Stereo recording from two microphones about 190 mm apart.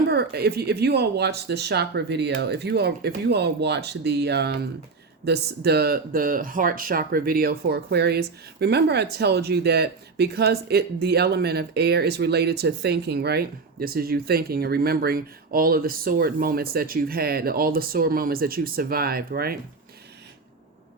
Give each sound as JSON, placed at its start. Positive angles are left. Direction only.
{"t": 0.1, "sound": "speech", "side_deg": -55}